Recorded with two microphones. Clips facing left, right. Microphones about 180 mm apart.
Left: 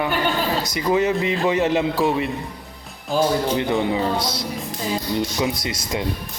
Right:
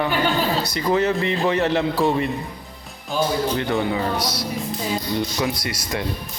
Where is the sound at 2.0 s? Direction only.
Centre (ahead or behind).